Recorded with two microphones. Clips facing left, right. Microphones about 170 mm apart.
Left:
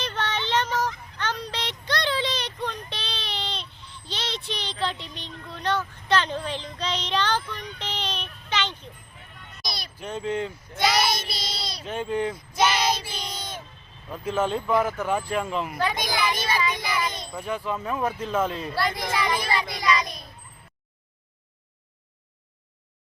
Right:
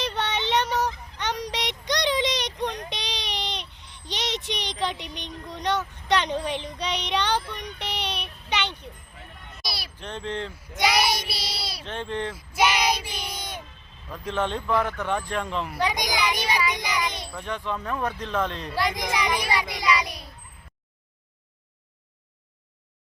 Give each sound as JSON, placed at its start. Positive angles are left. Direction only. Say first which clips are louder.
{"t": 0.0, "sound": "child singing", "louder": "right 2 dB", "side_deg": -15}
{"t": 1.2, "sound": "a sound", "louder": "right 1 dB", "side_deg": -15}
{"t": 2.9, "sound": "child singing", "louder": "right 1 dB", "side_deg": -15}
{"t": 9.6, "sound": "a sound", "louder": "even", "side_deg": -5}
{"t": 10.0, "sound": "speech", "louder": "left 4 dB", "side_deg": 10}
{"t": 10.8, "sound": "child singing", "louder": "even", "side_deg": -15}
{"t": 11.9, "sound": "speech", "louder": "left 4 dB", "side_deg": 10}
{"t": 12.3, "sound": "child singing", "louder": "even", "side_deg": -10}
{"t": 14.1, "sound": "speech", "louder": "left 2 dB", "side_deg": 5}
{"t": 15.8, "sound": "child singing", "louder": "right 2 dB", "side_deg": -15}
{"t": 17.3, "sound": "speech", "louder": "left 2 dB", "side_deg": 5}
{"t": 18.8, "sound": "a child's voice", "louder": "right 1 dB", "side_deg": -15}